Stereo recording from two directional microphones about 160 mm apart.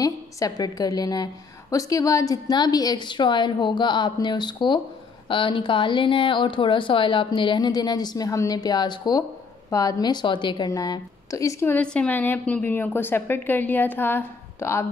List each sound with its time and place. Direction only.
0.0 s a woman's voice: 20° left (ahead or behind)